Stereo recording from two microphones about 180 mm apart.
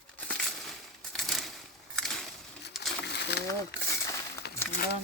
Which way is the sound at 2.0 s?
Centre (ahead or behind).